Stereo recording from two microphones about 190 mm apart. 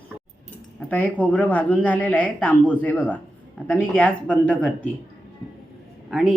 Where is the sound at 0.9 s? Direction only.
10° left (ahead or behind).